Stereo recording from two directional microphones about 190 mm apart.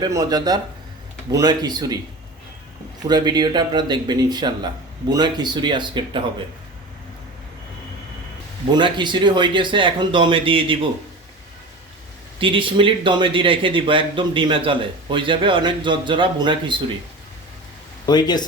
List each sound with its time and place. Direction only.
0.0 s speech: 20° right (ahead or behind)
3.1 s speech: 20° right (ahead or behind)
8.7 s speech: 25° right (ahead or behind)
12.4 s speech: 25° right (ahead or behind)
18.0 s speech: 20° left (ahead or behind)